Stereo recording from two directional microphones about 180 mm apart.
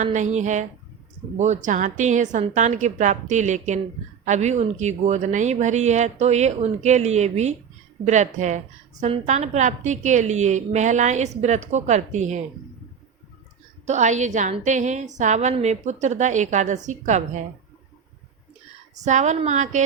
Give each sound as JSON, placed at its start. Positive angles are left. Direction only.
{"t": 0.0, "sound": "a woman's voice", "side_deg": -40}
{"t": 13.8, "sound": "a woman's voice", "side_deg": -40}
{"t": 19.0, "sound": "a woman's voice", "side_deg": -40}